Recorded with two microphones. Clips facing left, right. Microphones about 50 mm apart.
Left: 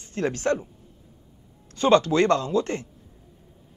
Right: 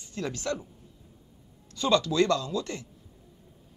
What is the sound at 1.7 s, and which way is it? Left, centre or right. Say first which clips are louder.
Speech: left 5 dB; left.